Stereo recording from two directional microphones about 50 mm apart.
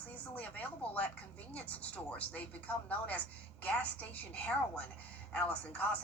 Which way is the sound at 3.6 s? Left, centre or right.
Left.